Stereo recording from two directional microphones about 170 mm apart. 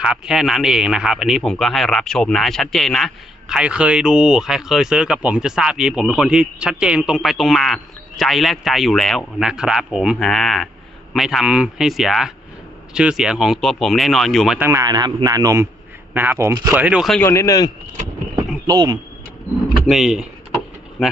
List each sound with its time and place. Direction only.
0.0 s speech: 5° right (ahead or behind)
14.6 s a man's voice: 15° right (ahead or behind)
17.2 s speech: 15° left (ahead or behind)
18.6 s speech: 20° right (ahead or behind)
19.7 s speech: centre (ahead or behind)